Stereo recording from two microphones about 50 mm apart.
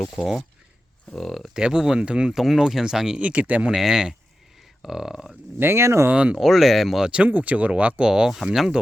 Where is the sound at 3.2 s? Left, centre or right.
Right.